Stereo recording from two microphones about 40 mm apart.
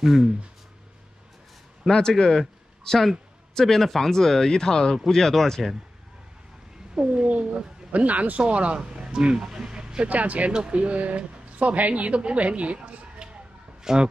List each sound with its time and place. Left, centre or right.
0.0 s speech: centre
1.9 s speech: centre
7.0 s speech: centre
7.9 s speech: right
8.9 s speech: centre
10.0 s speech: right
10.5 s a woman's voice: right
13.9 s speech: centre